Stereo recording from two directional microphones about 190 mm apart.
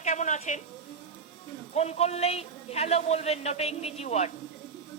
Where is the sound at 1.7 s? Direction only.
35° left (ahead or behind).